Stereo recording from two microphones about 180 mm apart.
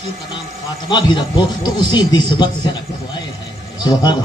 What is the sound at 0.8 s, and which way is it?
Speech, 25° left (ahead or behind).